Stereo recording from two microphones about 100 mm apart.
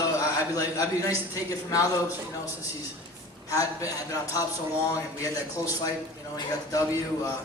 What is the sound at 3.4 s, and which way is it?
A man's voice, 35° left (ahead or behind).